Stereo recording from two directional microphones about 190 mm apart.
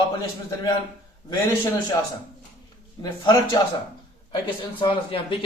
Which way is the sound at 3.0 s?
20° left (ahead or behind).